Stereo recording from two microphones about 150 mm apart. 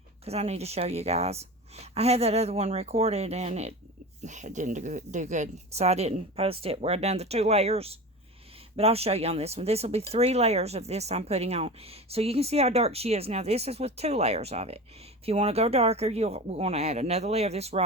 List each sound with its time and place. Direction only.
0.3 s speech: 45° right (ahead or behind)